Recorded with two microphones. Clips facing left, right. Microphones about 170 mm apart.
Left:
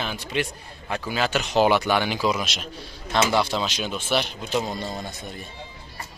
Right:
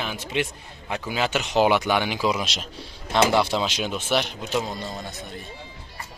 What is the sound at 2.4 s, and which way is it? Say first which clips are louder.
Speech: even; 30° right (ahead or behind).